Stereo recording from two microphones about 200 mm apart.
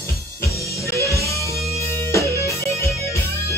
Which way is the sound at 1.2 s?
15° left (ahead or behind).